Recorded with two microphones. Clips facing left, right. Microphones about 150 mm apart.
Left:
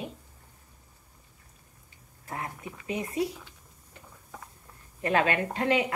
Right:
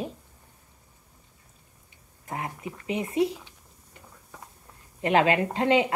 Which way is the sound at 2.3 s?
20° right (ahead or behind).